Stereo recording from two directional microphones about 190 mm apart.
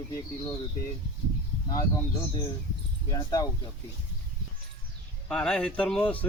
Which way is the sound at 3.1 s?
20° left (ahead or behind).